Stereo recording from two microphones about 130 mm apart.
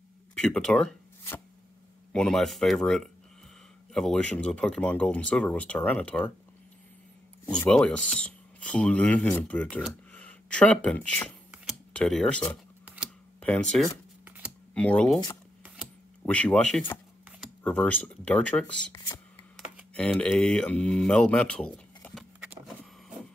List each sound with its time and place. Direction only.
0.4 s speech: 5° left (ahead or behind)
2.1 s speech: centre (ahead or behind)
7.6 s speech: 10° left (ahead or behind)
12.8 s camera: 10° right (ahead or behind)
13.4 s speech: 10° left (ahead or behind)
14.2 s computer keyboard: 15° right (ahead or behind)
14.7 s speech: 10° left (ahead or behind)
15.6 s a sound: 5° right (ahead or behind)
16.2 s speech: 10° left (ahead or behind)
18.9 s speech: 35° left (ahead or behind)
19.5 s speech: 5° left (ahead or behind)